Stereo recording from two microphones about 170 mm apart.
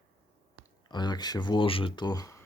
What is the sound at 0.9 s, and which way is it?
Speech, 25° left (ahead or behind).